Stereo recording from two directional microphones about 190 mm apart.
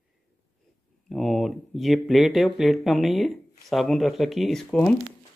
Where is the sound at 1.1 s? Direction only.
Centre (ahead or behind).